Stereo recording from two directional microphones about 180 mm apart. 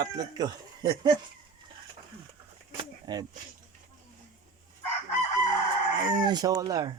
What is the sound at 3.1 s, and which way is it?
Speech, 20° right (ahead or behind).